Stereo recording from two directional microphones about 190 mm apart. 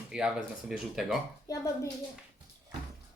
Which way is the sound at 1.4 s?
15° left (ahead or behind).